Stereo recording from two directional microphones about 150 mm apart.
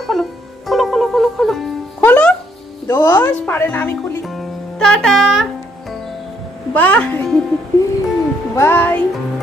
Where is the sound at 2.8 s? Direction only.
20° left (ahead or behind).